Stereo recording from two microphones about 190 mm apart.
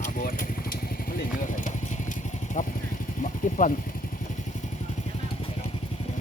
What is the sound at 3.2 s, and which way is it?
Speech, 40° left (ahead or behind).